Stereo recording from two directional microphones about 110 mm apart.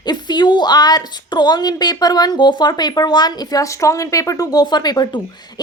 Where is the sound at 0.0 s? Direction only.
40° left (ahead or behind).